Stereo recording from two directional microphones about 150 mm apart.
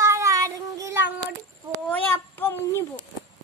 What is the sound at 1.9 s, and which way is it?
A child's voice, 10° left (ahead or behind).